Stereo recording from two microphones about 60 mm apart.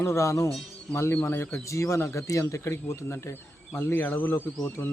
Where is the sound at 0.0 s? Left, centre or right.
Left.